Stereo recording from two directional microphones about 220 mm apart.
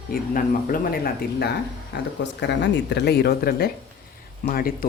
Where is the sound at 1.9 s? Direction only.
50° left (ahead or behind).